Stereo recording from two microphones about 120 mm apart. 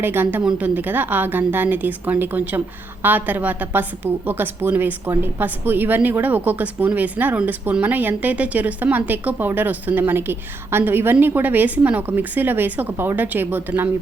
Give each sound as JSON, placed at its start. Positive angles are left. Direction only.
{"t": 0.0, "sound": "a woman's voice", "side_deg": -15}